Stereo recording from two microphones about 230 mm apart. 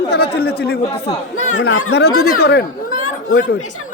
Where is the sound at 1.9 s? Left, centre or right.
Left.